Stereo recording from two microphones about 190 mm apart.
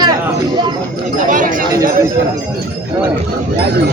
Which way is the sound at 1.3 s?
45° right (ahead or behind).